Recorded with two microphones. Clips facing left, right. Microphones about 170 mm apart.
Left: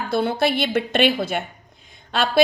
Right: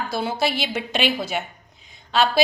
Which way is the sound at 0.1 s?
55° left (ahead or behind).